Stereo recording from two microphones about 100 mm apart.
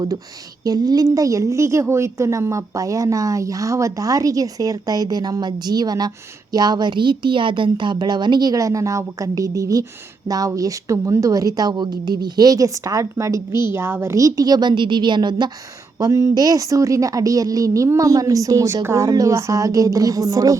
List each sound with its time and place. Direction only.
0.6 s a woman's voice: 40° right (ahead or behind)
16.0 s a woman's voice: 35° right (ahead or behind)